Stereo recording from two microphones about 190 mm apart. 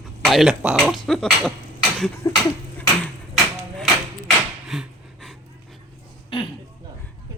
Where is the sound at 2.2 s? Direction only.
15° left (ahead or behind).